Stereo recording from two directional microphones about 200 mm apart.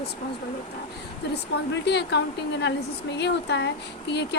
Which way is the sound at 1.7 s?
60° left (ahead or behind).